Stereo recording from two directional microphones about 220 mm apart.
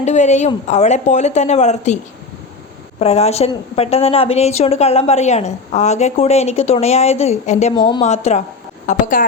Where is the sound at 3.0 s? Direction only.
30° left (ahead or behind).